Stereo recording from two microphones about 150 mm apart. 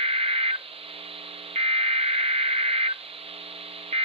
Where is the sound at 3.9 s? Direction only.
40° right (ahead or behind).